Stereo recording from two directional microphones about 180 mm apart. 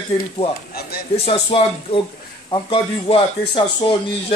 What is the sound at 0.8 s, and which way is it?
Speech, 60° left (ahead or behind).